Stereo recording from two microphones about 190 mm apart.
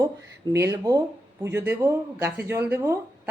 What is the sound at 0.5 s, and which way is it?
Speech, 15° right (ahead or behind).